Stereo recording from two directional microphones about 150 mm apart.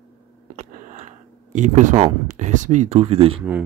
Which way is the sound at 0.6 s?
50° right (ahead or behind).